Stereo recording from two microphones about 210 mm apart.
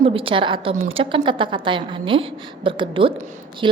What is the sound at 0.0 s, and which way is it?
A woman's voice, 25° right (ahead or behind).